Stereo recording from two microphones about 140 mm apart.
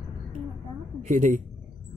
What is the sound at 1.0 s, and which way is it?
Speech, 60° right (ahead or behind).